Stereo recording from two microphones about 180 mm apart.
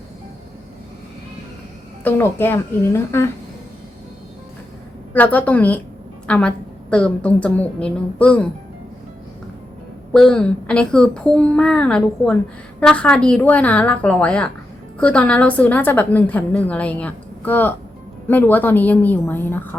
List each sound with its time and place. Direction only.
2.0 s a woman's voice: 15° left (ahead or behind)
5.1 s a woman's voice: 10° left (ahead or behind)
10.1 s a child's voice: 5° left (ahead or behind)